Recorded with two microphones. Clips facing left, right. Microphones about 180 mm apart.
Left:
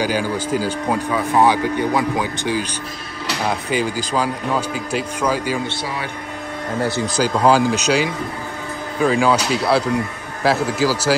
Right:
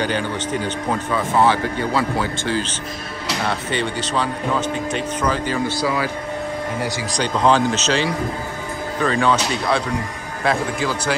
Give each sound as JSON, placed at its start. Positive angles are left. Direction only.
{"t": 0.0, "sound": "speech", "side_deg": 5}
{"t": 5.7, "sound": "a man's voice", "side_deg": 25}
{"t": 7.1, "sound": "speech", "side_deg": 5}